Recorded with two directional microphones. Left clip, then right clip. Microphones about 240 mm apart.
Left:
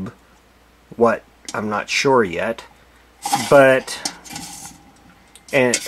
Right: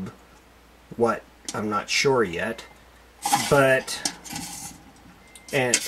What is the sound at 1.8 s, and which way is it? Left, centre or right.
Speech, centre.